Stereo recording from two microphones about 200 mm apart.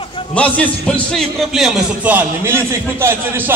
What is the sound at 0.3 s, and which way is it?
A man's voice, 5° left (ahead or behind).